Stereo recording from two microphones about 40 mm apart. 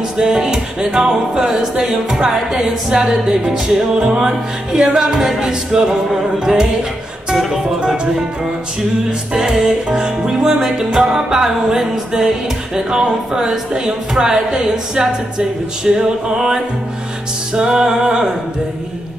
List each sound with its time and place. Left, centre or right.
0.2 s speech: centre
4.2 s music: centre
6.4 s speech: centre
7.8 s music: right
9.3 s speech: centre
17.6 s music: centre